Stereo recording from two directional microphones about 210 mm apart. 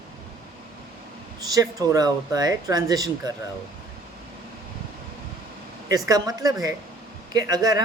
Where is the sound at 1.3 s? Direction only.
15° right (ahead or behind).